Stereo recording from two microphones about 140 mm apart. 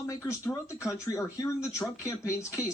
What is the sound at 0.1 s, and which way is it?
Speech, 20° left (ahead or behind).